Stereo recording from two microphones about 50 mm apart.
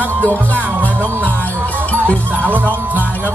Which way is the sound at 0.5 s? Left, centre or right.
Right.